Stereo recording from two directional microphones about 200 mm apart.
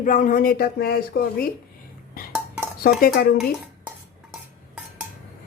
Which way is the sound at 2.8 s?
45° left (ahead or behind).